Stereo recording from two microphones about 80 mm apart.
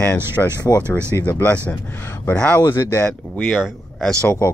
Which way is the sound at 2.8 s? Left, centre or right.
Left.